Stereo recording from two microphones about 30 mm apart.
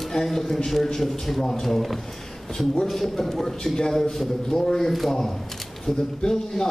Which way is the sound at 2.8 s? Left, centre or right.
Centre.